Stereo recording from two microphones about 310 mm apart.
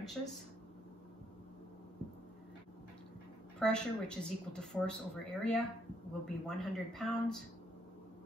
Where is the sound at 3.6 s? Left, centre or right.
Centre.